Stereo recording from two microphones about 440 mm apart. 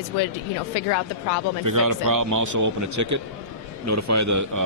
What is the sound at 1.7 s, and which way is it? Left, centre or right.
A man's voice, right.